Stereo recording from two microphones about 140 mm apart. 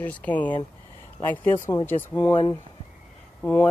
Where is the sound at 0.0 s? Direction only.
10° left (ahead or behind).